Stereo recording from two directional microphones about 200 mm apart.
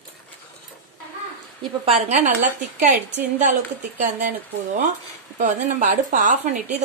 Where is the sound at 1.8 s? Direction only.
35° right (ahead or behind).